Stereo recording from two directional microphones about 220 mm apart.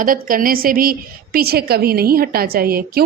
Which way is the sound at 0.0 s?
40° right (ahead or behind).